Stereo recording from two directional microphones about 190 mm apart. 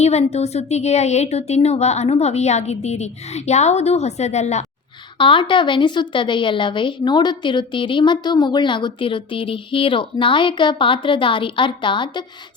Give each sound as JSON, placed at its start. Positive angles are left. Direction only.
{"t": 0.0, "sound": "a woman's voice", "side_deg": 35}